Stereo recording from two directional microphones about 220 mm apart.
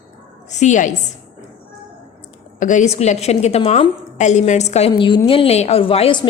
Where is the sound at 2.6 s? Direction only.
35° left (ahead or behind).